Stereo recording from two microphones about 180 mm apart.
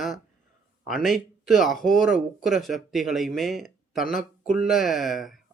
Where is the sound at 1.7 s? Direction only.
50° left (ahead or behind).